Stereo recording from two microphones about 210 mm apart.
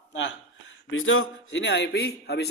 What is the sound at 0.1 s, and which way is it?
Speech, 60° left (ahead or behind).